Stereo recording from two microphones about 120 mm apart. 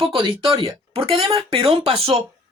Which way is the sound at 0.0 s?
45° right (ahead or behind).